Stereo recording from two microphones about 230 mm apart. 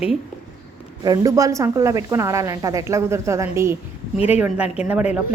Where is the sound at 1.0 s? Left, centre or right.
Centre.